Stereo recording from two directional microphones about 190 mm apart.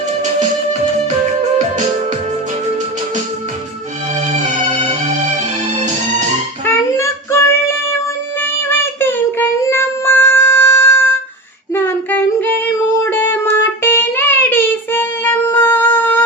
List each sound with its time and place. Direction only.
4.4 s music: 40° right (ahead or behind)
6.7 s child singing: 15° left (ahead or behind)